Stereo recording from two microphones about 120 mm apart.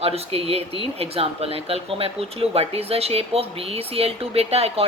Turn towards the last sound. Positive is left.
turn(degrees=-55)  # may be behind; listen again after turning